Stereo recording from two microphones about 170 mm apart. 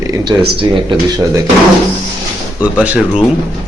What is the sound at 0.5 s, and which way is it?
Speech, 30° right (ahead or behind).